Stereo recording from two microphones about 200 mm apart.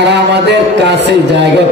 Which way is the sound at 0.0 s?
60° right (ahead or behind).